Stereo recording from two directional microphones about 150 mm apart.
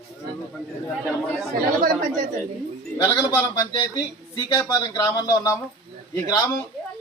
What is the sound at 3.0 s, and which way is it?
A man's voice, 20° left (ahead or behind).